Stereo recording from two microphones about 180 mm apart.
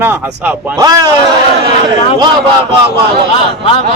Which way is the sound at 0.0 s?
10° right (ahead or behind).